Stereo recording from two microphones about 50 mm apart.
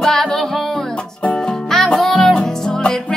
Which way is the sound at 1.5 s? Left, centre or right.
Centre.